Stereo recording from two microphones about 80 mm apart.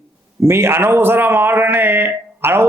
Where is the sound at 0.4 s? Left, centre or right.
Right.